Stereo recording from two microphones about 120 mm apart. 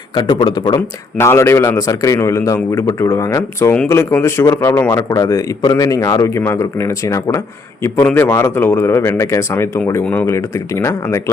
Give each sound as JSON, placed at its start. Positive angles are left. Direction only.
{"t": 0.1, "sound": "speech", "side_deg": 40}
{"t": 0.8, "sound": "speech", "side_deg": 20}